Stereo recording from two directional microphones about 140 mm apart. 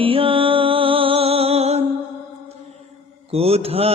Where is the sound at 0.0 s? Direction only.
40° right (ahead or behind).